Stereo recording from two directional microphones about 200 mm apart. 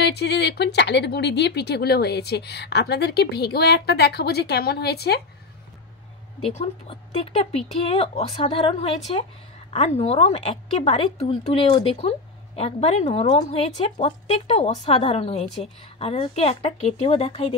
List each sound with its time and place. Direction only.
0.0 s speech: 55° left (ahead or behind)
6.6 s speech: 30° left (ahead or behind)